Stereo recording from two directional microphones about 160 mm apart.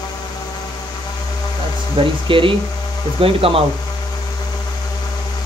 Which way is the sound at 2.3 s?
30° right (ahead or behind).